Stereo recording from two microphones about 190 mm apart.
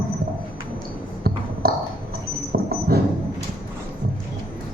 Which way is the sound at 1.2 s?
55° right (ahead or behind).